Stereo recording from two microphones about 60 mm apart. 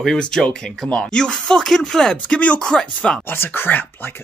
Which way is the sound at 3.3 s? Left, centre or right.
Left.